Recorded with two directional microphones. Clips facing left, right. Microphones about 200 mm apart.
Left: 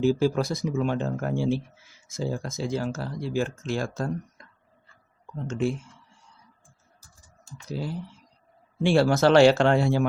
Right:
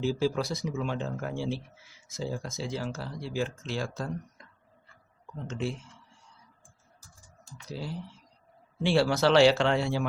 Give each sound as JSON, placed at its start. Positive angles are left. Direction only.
{"t": 0.0, "sound": "speech", "side_deg": 50}
{"t": 5.5, "sound": "speech", "side_deg": 45}
{"t": 7.4, "sound": "speech", "side_deg": 50}